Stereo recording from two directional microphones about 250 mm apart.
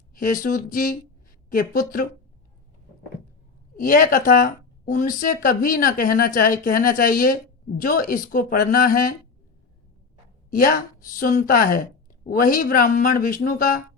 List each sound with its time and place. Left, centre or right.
0.1 s a sound: left
0.4 s speech: left
3.8 s speech: left
10.5 s speech: left